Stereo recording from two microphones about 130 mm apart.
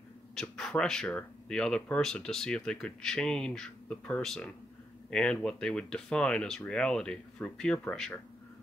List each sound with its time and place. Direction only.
0.4 s speech: 5° left (ahead or behind)